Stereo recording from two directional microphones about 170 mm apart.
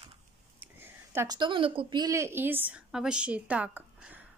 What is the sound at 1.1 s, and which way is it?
Speech, 25° right (ahead or behind).